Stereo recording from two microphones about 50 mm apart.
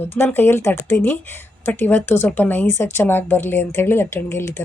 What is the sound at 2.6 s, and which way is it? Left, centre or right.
Speech, left.